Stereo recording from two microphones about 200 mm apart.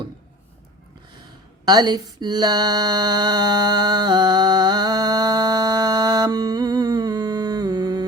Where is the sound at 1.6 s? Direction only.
20° right (ahead or behind).